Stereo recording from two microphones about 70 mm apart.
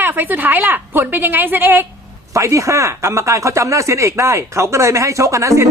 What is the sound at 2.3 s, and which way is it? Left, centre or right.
Speech, right.